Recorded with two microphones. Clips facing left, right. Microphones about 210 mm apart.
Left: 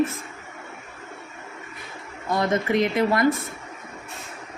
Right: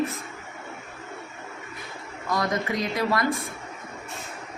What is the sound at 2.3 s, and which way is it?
Speech, 25° left (ahead or behind).